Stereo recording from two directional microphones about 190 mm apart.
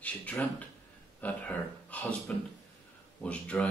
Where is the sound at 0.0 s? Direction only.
10° left (ahead or behind).